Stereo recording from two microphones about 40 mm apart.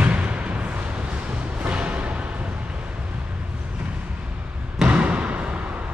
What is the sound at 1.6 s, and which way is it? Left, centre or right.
Music, right.